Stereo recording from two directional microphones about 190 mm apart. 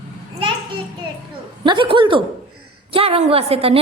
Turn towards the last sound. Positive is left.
turn(degrees=-30)  # may be behind; listen again after turning